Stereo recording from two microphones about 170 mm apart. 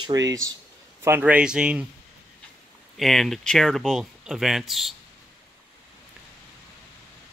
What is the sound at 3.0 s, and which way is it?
Speech, centre (ahead or behind).